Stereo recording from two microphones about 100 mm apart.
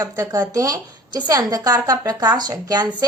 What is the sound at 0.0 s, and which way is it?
A woman's voice, 35° right (ahead or behind).